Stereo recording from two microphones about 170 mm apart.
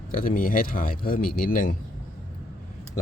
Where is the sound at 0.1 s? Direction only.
55° left (ahead or behind).